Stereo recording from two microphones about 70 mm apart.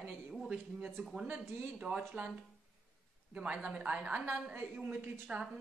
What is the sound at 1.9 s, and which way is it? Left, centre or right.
Speech, centre.